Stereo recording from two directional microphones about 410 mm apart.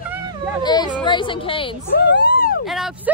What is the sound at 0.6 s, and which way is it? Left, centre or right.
Speech, centre.